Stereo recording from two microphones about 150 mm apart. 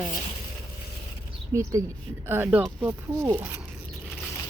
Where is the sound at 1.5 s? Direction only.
20° right (ahead or behind).